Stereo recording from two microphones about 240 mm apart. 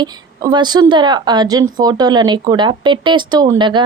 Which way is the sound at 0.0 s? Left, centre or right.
Centre.